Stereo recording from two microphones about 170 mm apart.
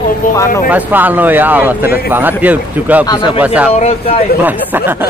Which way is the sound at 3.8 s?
35° left (ahead or behind).